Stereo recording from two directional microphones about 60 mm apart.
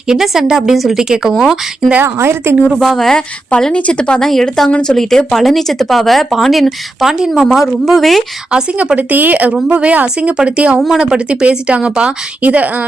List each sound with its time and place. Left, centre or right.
0.1 s a woman's voice: centre
2.0 s a woman's voice: right
2.6 s speech: centre
3.2 s a woman's voice: centre
8.5 s a woman's voice: centre
9.0 s speech: right